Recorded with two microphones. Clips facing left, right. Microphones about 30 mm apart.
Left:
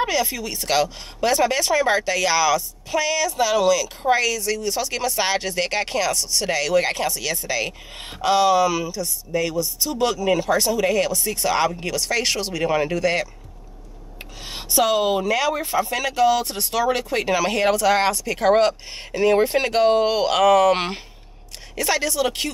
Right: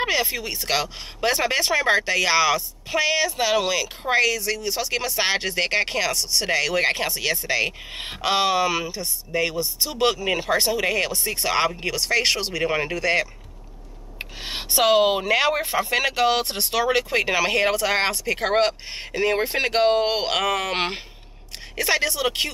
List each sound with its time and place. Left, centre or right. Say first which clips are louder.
0.0 s speech: left 1 dB; right
11.7 s speech: right 1 dB; right
14.1 s speech: right 4 dB; right
17.2 s speech: even; right